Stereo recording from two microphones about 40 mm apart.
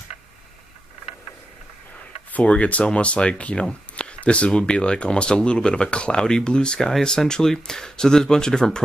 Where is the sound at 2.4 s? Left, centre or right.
Left.